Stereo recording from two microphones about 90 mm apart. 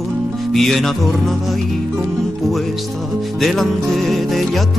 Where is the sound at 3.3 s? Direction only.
Centre (ahead or behind).